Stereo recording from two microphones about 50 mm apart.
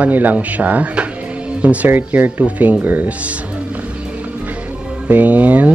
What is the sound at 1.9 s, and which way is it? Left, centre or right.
Speech, right.